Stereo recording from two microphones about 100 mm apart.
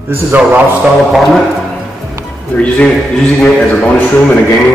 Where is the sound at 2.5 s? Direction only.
10° left (ahead or behind).